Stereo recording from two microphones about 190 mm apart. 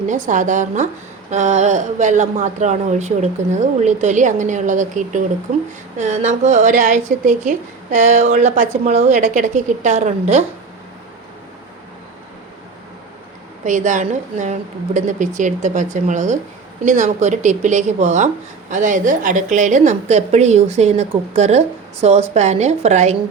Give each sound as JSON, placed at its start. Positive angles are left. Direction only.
{"t": 0.0, "sound": "a woman's voice", "side_deg": -40}
{"t": 13.7, "sound": "a woman's voice", "side_deg": -40}